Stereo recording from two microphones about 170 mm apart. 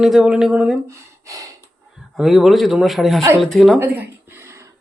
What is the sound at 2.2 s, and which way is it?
Speech, centre (ahead or behind).